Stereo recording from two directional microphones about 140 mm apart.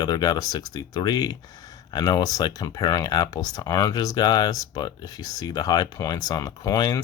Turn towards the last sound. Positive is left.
turn(degrees=25)  # may be behind; listen again after turning